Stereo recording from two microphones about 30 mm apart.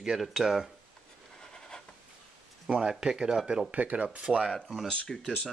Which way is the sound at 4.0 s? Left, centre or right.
Right.